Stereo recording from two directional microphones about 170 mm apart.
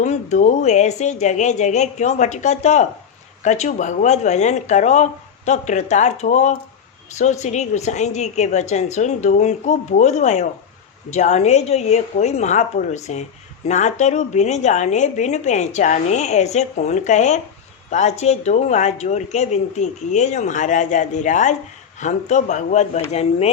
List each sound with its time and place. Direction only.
0.0 s a woman's voice: 45° left (ahead or behind)